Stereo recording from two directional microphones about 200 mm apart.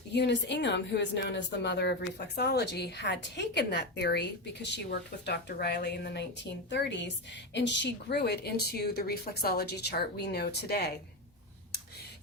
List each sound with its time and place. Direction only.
0.1 s a woman's voice: 60° left (ahead or behind)